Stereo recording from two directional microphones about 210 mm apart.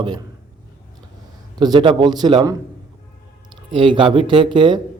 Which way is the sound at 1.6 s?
20° right (ahead or behind).